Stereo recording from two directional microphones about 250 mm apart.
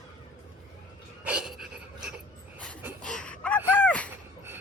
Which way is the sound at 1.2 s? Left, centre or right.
Centre.